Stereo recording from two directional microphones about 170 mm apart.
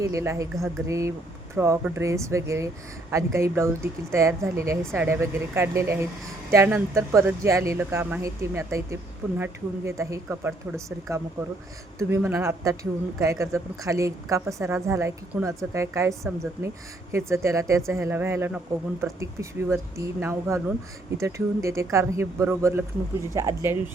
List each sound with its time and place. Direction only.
0.0 s speech: 15° right (ahead or behind)